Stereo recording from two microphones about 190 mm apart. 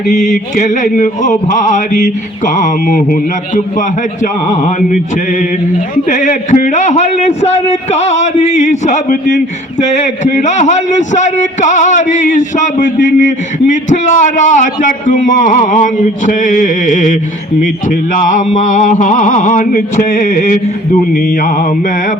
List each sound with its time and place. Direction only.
0.1 s a man's voice: 40° left (ahead or behind)